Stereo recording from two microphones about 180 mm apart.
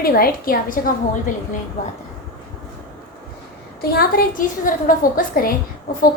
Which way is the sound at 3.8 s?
55° left (ahead or behind).